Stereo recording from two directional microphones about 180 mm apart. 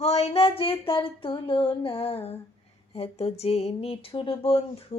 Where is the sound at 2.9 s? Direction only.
35° left (ahead or behind).